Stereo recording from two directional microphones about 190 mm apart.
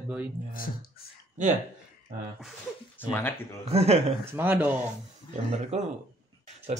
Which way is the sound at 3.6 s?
35° right (ahead or behind).